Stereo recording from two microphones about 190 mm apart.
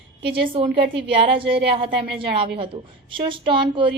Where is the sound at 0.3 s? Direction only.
30° right (ahead or behind).